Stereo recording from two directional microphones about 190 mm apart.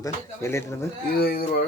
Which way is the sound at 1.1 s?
55° left (ahead or behind).